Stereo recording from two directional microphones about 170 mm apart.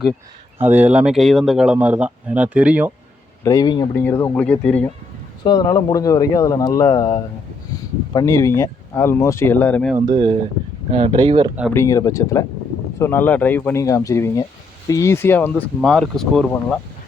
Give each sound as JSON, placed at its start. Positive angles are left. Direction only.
{"t": 0.6, "sound": "speech", "side_deg": -10}
{"t": 3.4, "sound": "speech", "side_deg": 20}
{"t": 5.4, "sound": "speech", "side_deg": 25}
{"t": 10.1, "sound": "speech", "side_deg": -25}
{"t": 11.7, "sound": "speech", "side_deg": 15}